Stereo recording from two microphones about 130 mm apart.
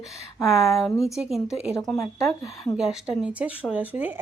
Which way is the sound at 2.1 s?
25° left (ahead or behind).